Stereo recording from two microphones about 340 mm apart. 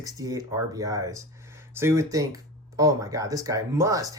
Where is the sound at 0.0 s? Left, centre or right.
Centre.